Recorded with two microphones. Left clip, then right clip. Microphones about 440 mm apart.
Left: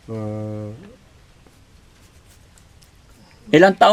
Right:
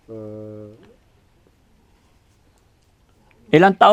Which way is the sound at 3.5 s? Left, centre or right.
Right.